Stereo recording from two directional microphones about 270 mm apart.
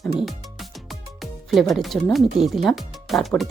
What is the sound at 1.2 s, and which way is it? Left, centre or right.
Speech, centre.